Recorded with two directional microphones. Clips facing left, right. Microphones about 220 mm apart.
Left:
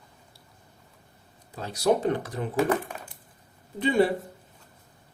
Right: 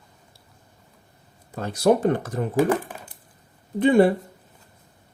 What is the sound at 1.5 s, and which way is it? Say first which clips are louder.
Speech: right 5 dB; 50° right (ahead or behind).